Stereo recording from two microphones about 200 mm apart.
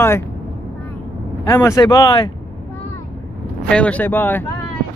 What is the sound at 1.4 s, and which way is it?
Speech, 15° left (ahead or behind).